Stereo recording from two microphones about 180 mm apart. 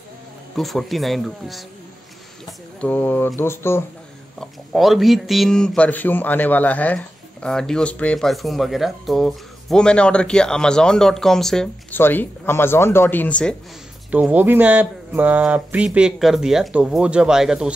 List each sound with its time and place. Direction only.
0.6 s speech: centre (ahead or behind)
2.8 s speech: 10° left (ahead or behind)
4.4 s speech: centre (ahead or behind)
14.1 s speech: 10° right (ahead or behind)